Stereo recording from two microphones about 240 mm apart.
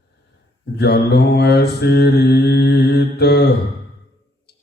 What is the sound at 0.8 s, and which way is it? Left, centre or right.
Mantra, left.